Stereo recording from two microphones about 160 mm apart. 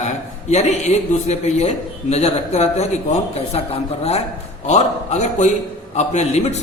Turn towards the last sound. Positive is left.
turn(degrees=45)  # may be behind; listen again after turning